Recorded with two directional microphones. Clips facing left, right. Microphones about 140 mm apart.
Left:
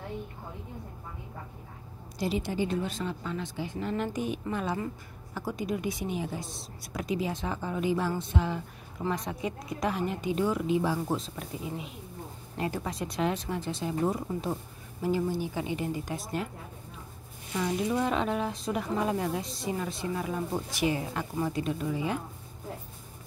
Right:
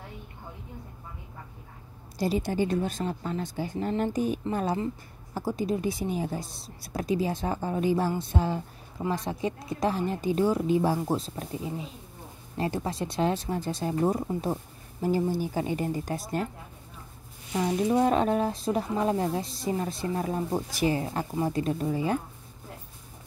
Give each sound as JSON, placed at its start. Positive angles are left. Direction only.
{"t": 2.1, "sound": "speech", "side_deg": -40}
{"t": 17.6, "sound": "speech", "side_deg": -30}